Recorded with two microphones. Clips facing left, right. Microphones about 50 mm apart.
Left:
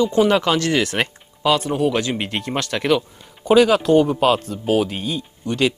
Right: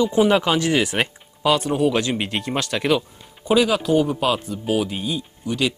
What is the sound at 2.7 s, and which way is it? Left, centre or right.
Speech, centre.